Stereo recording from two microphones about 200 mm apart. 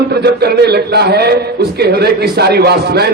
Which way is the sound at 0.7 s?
55° right (ahead or behind).